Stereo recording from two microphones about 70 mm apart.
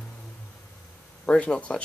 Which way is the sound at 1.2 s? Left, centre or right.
Centre.